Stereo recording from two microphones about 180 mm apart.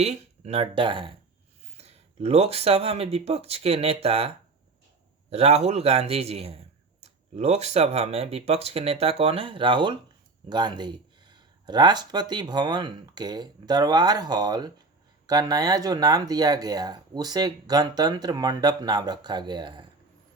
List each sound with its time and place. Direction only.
0.0 s speech: 35° right (ahead or behind)
5.3 s speech: 35° right (ahead or behind)